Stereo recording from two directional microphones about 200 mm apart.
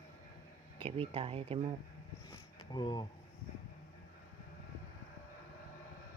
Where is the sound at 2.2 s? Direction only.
20° left (ahead or behind).